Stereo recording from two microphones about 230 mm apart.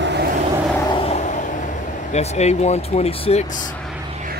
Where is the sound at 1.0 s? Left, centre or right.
Left.